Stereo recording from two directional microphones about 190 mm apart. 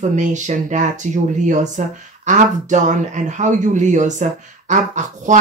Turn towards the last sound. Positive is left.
turn(degrees=-40)  # may be behind; listen again after turning